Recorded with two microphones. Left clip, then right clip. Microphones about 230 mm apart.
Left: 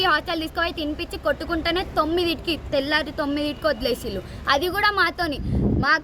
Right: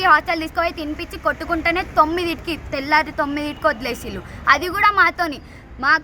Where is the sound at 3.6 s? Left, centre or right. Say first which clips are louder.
Right 3 dB; centre.